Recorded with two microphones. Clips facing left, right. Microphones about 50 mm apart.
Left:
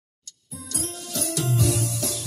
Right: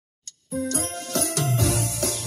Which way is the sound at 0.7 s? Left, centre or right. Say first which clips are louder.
Right 5 dB; right.